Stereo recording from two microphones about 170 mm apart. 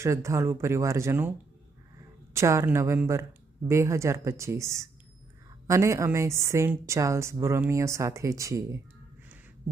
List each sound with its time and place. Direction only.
0.0 s speech: 15° right (ahead or behind)
2.3 s speech: 15° right (ahead or behind)